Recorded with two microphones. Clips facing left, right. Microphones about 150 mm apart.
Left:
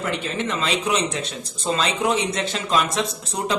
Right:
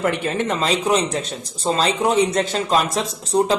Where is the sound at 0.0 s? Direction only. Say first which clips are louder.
Right 5 dB; 55° right (ahead or behind).